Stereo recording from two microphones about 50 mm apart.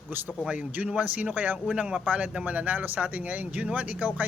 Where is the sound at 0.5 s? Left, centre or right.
Right.